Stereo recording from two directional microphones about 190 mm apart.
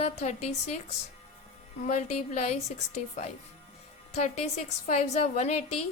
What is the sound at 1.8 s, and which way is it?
Speech, 40° left (ahead or behind).